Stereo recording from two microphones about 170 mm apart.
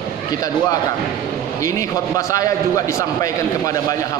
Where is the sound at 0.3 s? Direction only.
20° left (ahead or behind).